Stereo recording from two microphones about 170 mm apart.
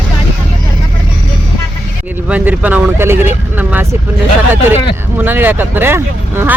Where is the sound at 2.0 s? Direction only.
10° right (ahead or behind).